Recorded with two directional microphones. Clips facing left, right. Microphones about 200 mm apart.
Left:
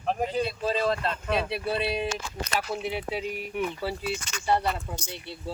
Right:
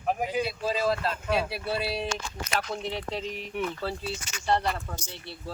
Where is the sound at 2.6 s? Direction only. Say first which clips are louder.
Left 2 dB; 5° left (ahead or behind).